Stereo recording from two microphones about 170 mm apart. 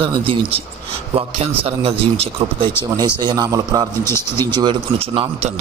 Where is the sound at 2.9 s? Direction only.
25° right (ahead or behind).